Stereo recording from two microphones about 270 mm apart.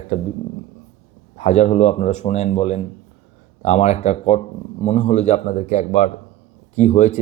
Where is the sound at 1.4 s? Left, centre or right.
Left.